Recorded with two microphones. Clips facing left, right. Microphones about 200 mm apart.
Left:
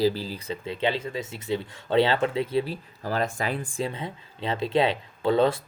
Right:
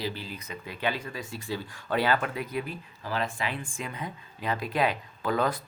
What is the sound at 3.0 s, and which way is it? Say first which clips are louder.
Speech: left 4 dB; 40° left (ahead or behind).